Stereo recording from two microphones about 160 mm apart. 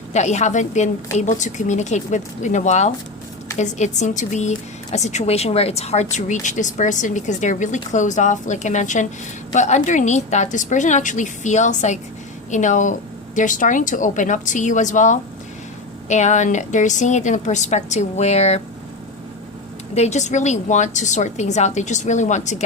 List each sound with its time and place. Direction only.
0.1 s a woman's voice: 45° left (ahead or behind)
19.9 s a woman's voice: 45° left (ahead or behind)